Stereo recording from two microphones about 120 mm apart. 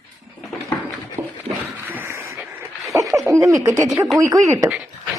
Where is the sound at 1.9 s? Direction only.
20° right (ahead or behind).